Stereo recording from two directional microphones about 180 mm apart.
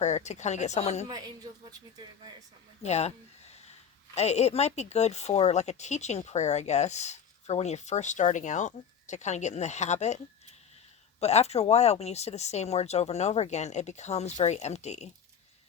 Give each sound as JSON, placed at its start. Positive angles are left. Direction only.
{"t": 0.0, "sound": "speech", "side_deg": 40}
{"t": 1.0, "sound": "a woman's voice", "side_deg": -20}
{"t": 2.8, "sound": "speech", "side_deg": 35}
{"t": 4.1, "sound": "speech", "side_deg": 35}
{"t": 11.2, "sound": "speech", "side_deg": 35}